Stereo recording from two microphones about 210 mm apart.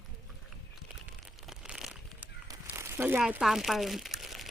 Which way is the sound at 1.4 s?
Centre (ahead or behind).